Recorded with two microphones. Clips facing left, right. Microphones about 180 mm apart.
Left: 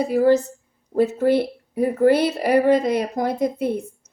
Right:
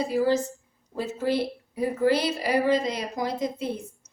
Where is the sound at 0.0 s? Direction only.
55° left (ahead or behind).